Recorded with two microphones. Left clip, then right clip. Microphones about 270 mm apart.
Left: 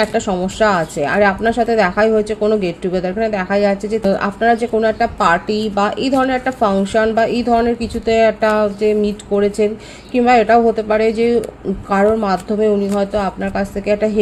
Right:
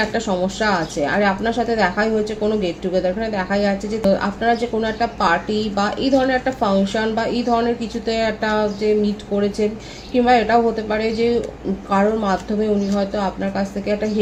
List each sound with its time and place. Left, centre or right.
0.0 s a woman's voice: left